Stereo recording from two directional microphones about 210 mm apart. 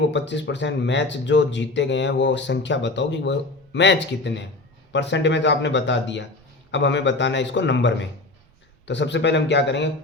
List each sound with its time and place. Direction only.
0.1 s speech: 60° left (ahead or behind)